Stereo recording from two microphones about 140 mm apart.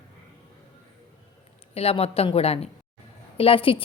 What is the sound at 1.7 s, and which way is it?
A woman's voice, 45° left (ahead or behind).